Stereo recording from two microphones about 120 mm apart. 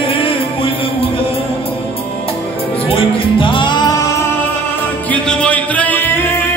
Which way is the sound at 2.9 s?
50° left (ahead or behind).